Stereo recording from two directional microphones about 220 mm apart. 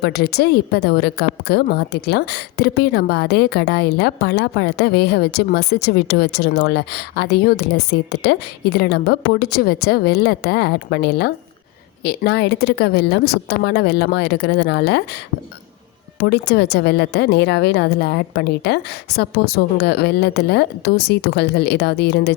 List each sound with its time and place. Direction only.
0.0 s a woman's voice: 45° left (ahead or behind)
16.2 s a woman's voice: 50° left (ahead or behind)